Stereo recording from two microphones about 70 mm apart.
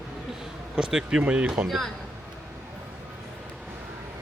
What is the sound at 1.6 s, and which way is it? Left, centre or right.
Speech, centre.